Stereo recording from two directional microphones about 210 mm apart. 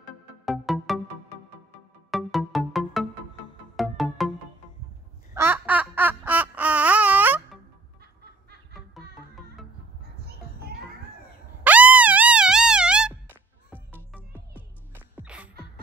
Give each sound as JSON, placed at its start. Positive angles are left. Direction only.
{"t": 0.5, "sound": "music", "side_deg": 0}
{"t": 2.0, "sound": "music", "side_deg": 0}
{"t": 5.3, "sound": "a sound", "side_deg": -10}
{"t": 8.7, "sound": "music", "side_deg": 0}
{"t": 11.6, "sound": "music", "side_deg": -5}